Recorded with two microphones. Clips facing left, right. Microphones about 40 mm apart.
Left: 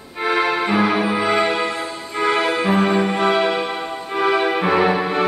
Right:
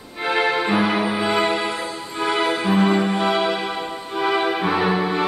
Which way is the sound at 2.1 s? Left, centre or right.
Centre.